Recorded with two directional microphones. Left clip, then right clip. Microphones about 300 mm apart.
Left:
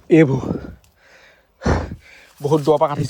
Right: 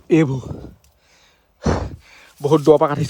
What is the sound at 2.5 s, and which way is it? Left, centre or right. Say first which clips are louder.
Speech: right 3 dB; right.